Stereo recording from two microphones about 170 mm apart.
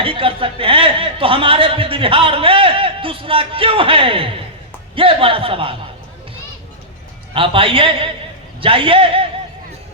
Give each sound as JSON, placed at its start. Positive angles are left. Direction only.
{"t": 0.0, "sound": "a man's voice", "side_deg": -30}
{"t": 7.3, "sound": "a man's voice", "side_deg": -30}